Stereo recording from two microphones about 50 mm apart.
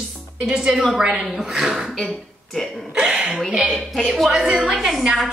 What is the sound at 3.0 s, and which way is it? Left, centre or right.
Speech, centre.